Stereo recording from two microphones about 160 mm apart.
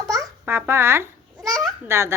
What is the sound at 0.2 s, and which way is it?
A child's voice, 15° right (ahead or behind).